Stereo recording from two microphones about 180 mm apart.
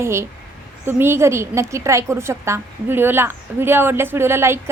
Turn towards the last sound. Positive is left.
turn(degrees=-15)  # may be behind; listen again after turning